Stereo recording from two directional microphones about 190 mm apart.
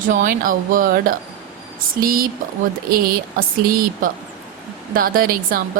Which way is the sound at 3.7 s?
50° right (ahead or behind).